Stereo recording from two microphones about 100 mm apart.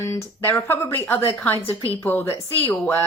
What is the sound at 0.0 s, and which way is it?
A woman's voice, 30° left (ahead or behind).